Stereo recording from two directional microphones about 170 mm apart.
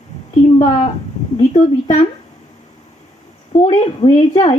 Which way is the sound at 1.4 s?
35° left (ahead or behind).